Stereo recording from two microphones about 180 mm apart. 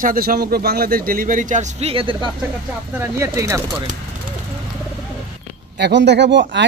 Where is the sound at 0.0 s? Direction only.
50° right (ahead or behind); by 2.3 s 25° right (ahead or behind).